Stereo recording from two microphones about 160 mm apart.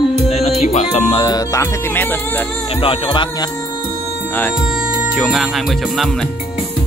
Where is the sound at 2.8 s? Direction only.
30° left (ahead or behind).